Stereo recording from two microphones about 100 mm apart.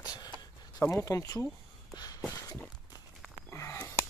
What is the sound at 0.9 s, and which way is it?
Speech, 30° left (ahead or behind).